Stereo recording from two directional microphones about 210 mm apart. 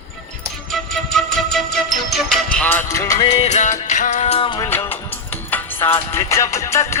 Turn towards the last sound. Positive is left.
turn(degrees=15)  # may be behind; listen again after turning